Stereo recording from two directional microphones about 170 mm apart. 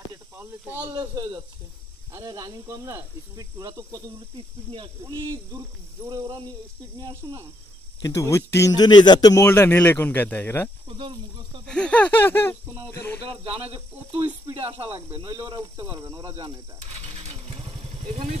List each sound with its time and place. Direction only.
0.1 s snake: 20° right (ahead or behind)
0.9 s speech: 25° right (ahead or behind)
8.0 s a man's voice: 15° left (ahead or behind)
10.9 s speech: 30° right (ahead or behind)
11.6 s a man's voice: 5° left (ahead or behind)
13.2 s speech: 35° right (ahead or behind)
15.1 s speech: 25° right (ahead or behind)
16.3 s vehicle: 35° right (ahead or behind)